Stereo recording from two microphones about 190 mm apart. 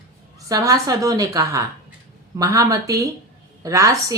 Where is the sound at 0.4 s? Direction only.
20° right (ahead or behind).